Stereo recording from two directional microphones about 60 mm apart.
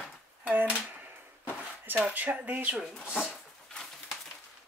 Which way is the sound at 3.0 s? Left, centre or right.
Left.